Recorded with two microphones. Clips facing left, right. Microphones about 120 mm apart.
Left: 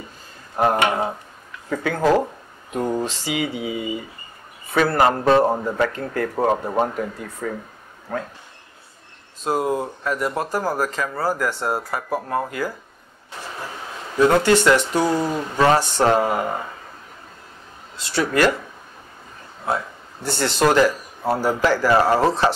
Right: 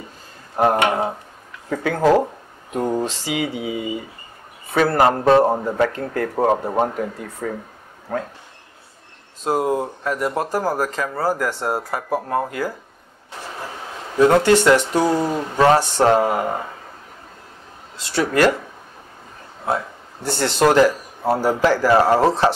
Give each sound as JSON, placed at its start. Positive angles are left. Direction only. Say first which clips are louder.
{"t": 0.7, "sound": "speech", "louder": "right 1 dB", "side_deg": -40}
{"t": 2.0, "sound": "speech", "louder": "right 2 dB", "side_deg": -20}
{"t": 2.7, "sound": "a man's voice", "louder": "right 2 dB", "side_deg": -35}
{"t": 3.1, "sound": "a man's voice", "louder": "right 1 dB", "side_deg": -55}
{"t": 5.5, "sound": "a man's voice", "louder": "right 2 dB", "side_deg": -30}
{"t": 9.4, "sound": "a man's voice", "louder": "right 2 dB", "side_deg": -45}
{"t": 13.3, "sound": "a sound", "louder": "right 1 dB", "side_deg": -35}
{"t": 14.9, "sound": "a man's voice", "louder": "right 2 dB", "side_deg": -35}
{"t": 18.1, "sound": "a man's voice", "louder": "right 2 dB", "side_deg": -40}
{"t": 19.6, "sound": "a sound", "louder": "right 1 dB", "side_deg": -35}
{"t": 20.4, "sound": "speech", "louder": "right 2 dB", "side_deg": -60}
{"t": 20.7, "sound": "a man's voice", "louder": "right 2 dB", "side_deg": -35}